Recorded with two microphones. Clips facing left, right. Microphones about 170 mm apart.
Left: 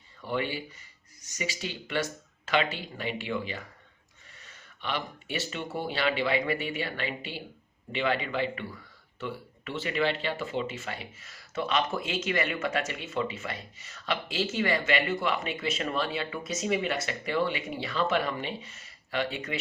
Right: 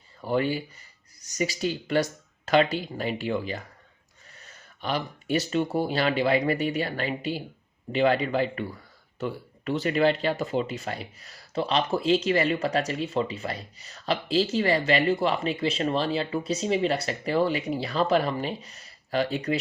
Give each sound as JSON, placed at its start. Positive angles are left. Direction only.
{"t": 0.2, "sound": "speech", "side_deg": -40}